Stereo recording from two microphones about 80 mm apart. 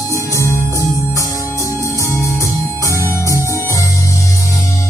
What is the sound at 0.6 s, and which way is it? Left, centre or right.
Music, right.